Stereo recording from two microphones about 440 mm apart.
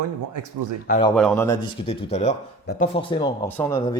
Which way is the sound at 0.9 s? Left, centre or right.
Centre.